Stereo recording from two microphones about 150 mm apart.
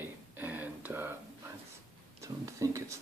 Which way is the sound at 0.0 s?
10° right (ahead or behind).